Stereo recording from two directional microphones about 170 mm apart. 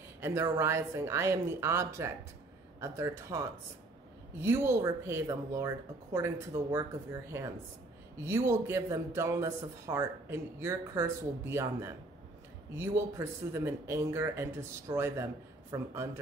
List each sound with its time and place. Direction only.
0.2 s speech: 15° right (ahead or behind)